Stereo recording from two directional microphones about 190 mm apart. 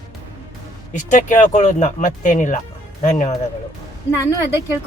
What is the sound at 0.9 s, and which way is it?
Speech, 40° left (ahead or behind).